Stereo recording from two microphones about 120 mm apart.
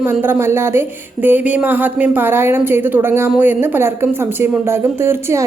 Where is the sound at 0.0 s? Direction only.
15° right (ahead or behind).